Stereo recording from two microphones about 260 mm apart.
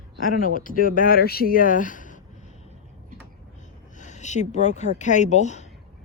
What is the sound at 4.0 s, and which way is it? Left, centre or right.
A woman's voice, left.